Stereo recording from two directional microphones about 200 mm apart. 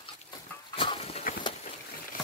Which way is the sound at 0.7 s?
25° left (ahead or behind).